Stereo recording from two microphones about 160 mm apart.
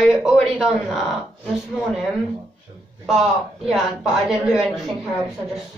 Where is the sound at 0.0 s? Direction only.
Centre (ahead or behind).